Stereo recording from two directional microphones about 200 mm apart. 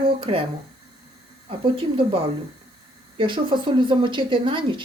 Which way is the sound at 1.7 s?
25° right (ahead or behind).